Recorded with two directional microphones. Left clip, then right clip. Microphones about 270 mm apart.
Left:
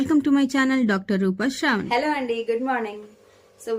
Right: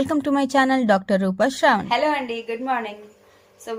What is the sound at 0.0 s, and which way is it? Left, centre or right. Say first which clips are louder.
A woman's voice: left 1 dB; centre.